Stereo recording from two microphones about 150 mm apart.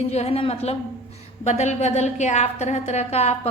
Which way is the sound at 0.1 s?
40° left (ahead or behind).